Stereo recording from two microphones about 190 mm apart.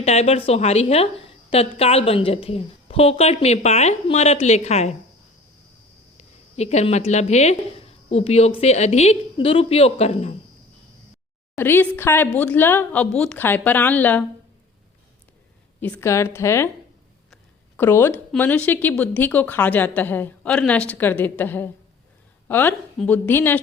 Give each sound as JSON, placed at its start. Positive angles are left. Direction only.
{"t": 0.0, "sound": "a woman's voice", "side_deg": 35}
{"t": 6.1, "sound": "a woman's voice", "side_deg": 35}
{"t": 11.5, "sound": "a woman's voice", "side_deg": 10}
{"t": 15.8, "sound": "a woman's voice", "side_deg": 10}
{"t": 17.7, "sound": "a woman's voice", "side_deg": 10}